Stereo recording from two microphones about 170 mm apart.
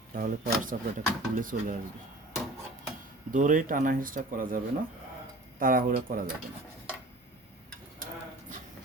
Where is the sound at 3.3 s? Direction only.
50° right (ahead or behind).